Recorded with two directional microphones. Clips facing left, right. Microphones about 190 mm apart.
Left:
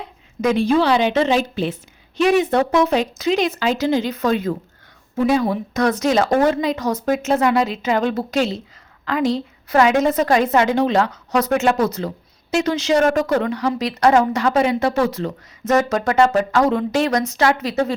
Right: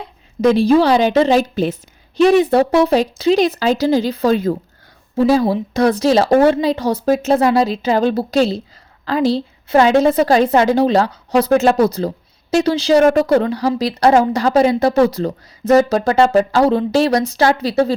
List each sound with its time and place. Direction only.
0.4 s a woman's voice: 35° right (ahead or behind)